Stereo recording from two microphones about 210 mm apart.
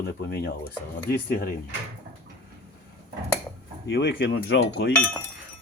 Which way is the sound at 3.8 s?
55° left (ahead or behind).